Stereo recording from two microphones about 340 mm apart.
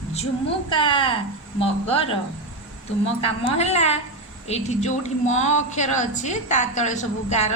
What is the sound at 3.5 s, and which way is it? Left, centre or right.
A woman's voice, centre.